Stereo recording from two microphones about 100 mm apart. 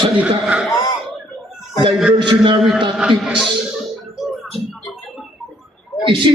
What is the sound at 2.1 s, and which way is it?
Speech, 55° right (ahead or behind).